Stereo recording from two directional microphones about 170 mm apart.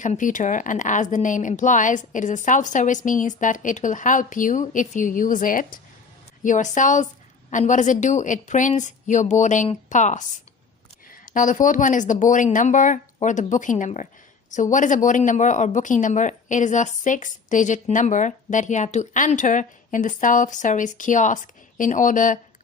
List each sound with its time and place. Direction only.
0.0 s speech: 50° left (ahead or behind)